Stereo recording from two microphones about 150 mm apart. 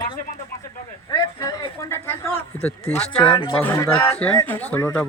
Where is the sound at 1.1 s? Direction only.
25° left (ahead or behind).